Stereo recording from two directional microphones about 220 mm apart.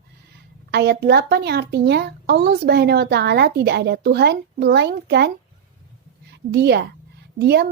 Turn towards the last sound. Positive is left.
turn(degrees=-50)  # may be behind; listen again after turning